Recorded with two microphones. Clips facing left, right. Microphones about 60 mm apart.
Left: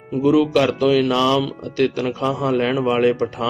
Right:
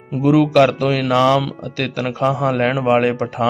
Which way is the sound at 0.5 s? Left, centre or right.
Right.